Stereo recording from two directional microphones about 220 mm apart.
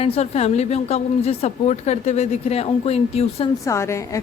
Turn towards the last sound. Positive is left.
turn(degrees=15)  # may be behind; listen again after turning